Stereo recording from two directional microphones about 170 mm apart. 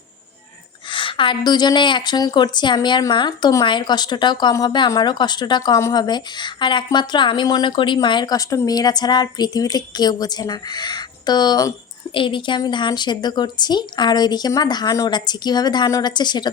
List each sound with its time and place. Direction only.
0.9 s a woman's voice: 30° left (ahead or behind)